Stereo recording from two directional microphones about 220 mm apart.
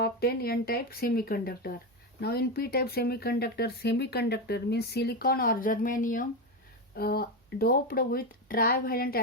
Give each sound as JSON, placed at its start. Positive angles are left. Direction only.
{"t": 0.0, "sound": "speech", "side_deg": 45}